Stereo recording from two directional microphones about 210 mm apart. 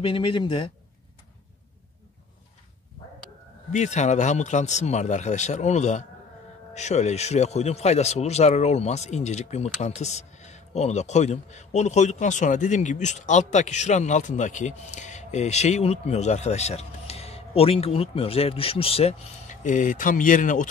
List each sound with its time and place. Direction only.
0.0 s speech: 25° left (ahead or behind)
3.7 s speech: 35° left (ahead or behind)